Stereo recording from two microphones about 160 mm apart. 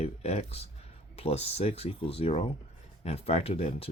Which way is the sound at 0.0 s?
45° left (ahead or behind).